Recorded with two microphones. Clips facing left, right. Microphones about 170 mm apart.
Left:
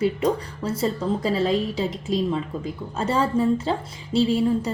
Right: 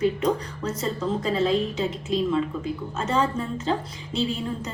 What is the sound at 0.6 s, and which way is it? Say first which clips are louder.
A woman's voice: left 5 dB; 30° left (ahead or behind).